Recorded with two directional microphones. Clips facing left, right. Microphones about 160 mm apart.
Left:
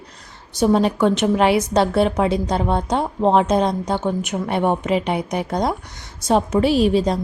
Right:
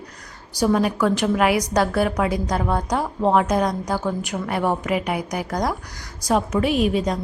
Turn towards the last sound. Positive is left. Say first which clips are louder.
# left 4 dB
turn(degrees=30)  # may be behind; listen again after turning